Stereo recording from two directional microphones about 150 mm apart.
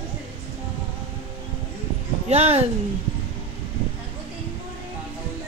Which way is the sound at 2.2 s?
45° right (ahead or behind).